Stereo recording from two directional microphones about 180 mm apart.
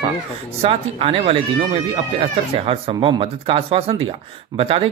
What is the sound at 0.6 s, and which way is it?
Speech, 30° right (ahead or behind).